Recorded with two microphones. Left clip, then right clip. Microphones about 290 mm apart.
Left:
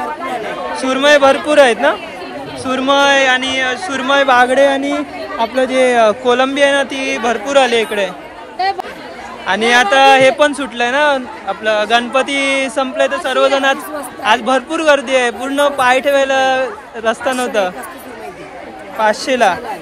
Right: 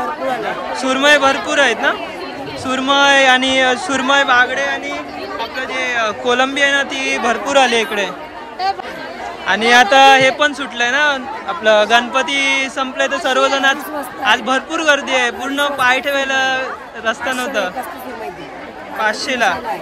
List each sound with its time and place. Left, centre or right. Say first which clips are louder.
0.7 s a man's voice: left 2 dB; centre
4.6 s a man's voice: left 6 dB; centre
9.5 s a man's voice: right 1 dB; centre
18.9 s a man's voice: left 4 dB; centre